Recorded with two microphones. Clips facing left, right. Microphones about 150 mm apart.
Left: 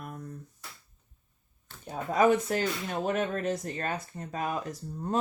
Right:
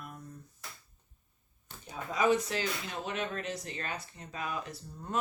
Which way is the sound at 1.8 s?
55° left (ahead or behind).